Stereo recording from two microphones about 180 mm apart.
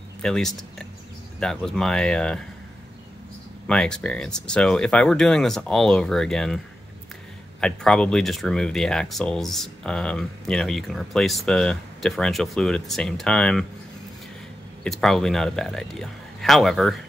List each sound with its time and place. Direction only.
0.2 s speech: 5° left (ahead or behind)
3.6 s speech: 5° left (ahead or behind)
7.6 s speech: 5° left (ahead or behind)
14.8 s speech: centre (ahead or behind)